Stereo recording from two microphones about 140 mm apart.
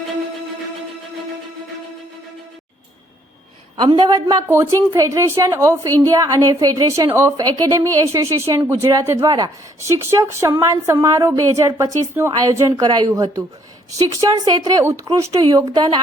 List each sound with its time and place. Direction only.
3.8 s a woman's voice: 30° right (ahead or behind)
4.4 s a woman's voice: 15° right (ahead or behind)